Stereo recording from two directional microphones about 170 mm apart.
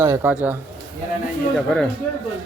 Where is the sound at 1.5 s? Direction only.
Centre (ahead or behind).